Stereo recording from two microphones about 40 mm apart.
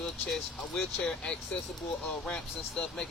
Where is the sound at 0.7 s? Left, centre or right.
Centre.